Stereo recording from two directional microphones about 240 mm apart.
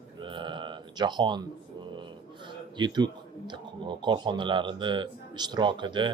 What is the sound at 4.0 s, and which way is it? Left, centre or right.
A man's voice, centre.